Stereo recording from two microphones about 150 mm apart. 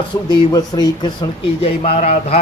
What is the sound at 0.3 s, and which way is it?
Speech, 25° left (ahead or behind).